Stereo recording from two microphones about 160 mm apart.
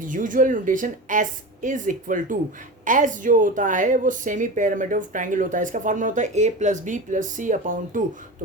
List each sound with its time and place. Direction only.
0.0 s a woman's voice: 55° right (ahead or behind)